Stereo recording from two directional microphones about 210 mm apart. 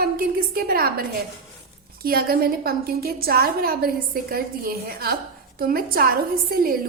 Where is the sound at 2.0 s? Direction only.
45° right (ahead or behind).